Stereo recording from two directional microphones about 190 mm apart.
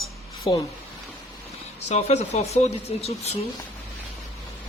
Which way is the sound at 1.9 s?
35° left (ahead or behind).